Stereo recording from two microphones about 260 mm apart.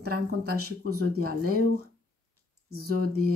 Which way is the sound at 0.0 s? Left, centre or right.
Right.